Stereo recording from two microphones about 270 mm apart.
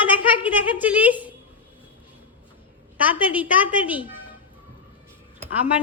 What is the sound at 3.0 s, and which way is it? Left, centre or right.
A woman's voice, centre.